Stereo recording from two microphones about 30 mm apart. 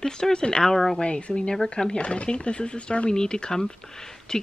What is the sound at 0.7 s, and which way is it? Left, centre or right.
Speech, centre.